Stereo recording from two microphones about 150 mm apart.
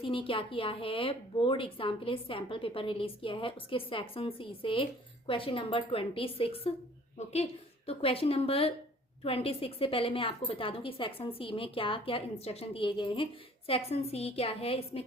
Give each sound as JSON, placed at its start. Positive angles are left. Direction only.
{"t": 0.0, "sound": "a woman's voice", "side_deg": 35}
{"t": 7.9, "sound": "a woman's voice", "side_deg": 40}